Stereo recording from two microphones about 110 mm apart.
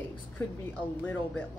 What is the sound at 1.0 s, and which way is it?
Speech, 15° left (ahead or behind).